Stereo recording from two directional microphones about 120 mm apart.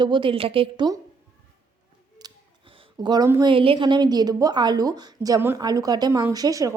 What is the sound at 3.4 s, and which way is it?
A woman's voice, 45° right (ahead or behind).